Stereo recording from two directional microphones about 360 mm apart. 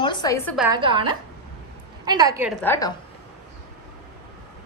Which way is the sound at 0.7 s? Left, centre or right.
Centre.